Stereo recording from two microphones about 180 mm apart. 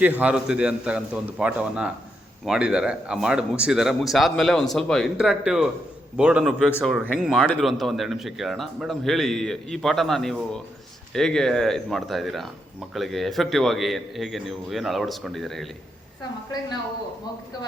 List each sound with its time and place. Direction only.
0.0 s a man's voice: 10° right (ahead or behind)